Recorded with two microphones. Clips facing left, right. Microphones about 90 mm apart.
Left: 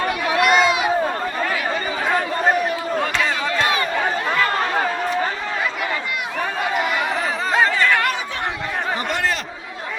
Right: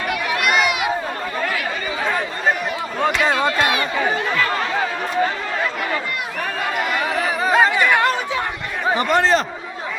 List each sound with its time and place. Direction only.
0.1 s run: 30° left (ahead or behind)
7.4 s chatter: 15° right (ahead or behind)
9.0 s a sound: 35° right (ahead or behind)